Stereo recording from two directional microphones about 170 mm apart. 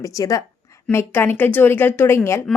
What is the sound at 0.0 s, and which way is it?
A woman's voice, 20° left (ahead or behind).